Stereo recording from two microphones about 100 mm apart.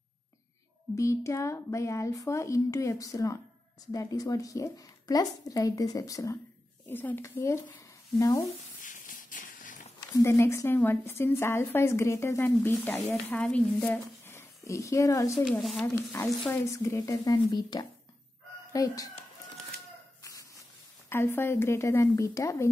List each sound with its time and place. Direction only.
0.9 s a woman's voice: 30° left (ahead or behind)
6.9 s a woman's voice: 20° left (ahead or behind)
7.2 s a woman's voice: 30° left (ahead or behind)
10.1 s a woman's voice: 30° left (ahead or behind); by 14.0 s 10° left (ahead or behind)
14.2 s a sound: 30° left (ahead or behind)
15.8 s a woman's voice: 20° left (ahead or behind)
16.6 s a woman's voice: 30° left (ahead or behind)
21.1 s a woman's voice: 25° left (ahead or behind)